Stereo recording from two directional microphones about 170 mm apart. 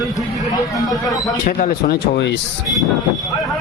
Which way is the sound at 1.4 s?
55° left (ahead or behind).